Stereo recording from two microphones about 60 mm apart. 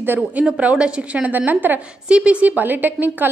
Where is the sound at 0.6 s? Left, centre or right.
Right.